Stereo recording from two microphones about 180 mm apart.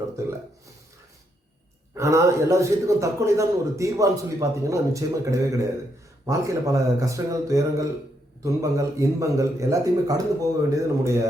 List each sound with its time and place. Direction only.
2.0 s a man's voice: 15° right (ahead or behind)